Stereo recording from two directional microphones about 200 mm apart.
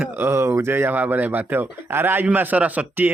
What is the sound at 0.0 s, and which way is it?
Speech, 10° right (ahead or behind).